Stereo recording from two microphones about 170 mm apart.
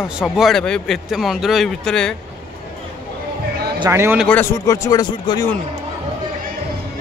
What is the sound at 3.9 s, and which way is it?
Speech, 15° right (ahead or behind).